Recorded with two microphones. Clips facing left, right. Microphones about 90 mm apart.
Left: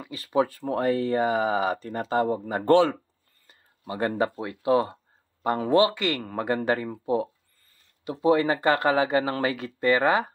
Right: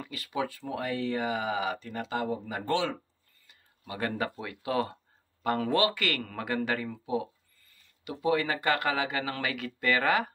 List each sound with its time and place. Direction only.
0.1 s speech: 35° left (ahead or behind)
3.4 s speech: 30° left (ahead or behind)